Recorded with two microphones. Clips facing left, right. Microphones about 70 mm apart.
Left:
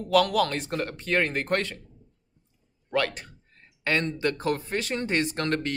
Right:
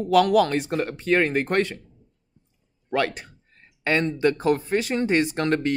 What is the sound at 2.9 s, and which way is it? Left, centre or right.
A man's voice, centre.